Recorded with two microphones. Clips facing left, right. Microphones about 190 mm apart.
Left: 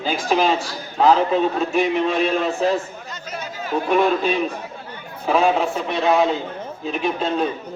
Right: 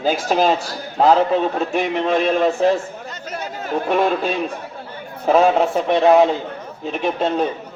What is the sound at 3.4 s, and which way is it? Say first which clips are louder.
Chatter: right 1 dB; 55° right (ahead or behind).